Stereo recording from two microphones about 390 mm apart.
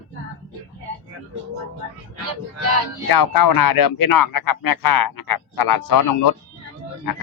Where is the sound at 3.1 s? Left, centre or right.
Left.